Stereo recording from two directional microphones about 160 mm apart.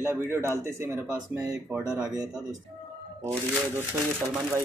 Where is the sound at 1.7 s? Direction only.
5° right (ahead or behind).